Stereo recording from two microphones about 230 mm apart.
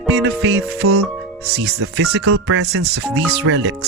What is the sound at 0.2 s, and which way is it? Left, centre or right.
Speech, right.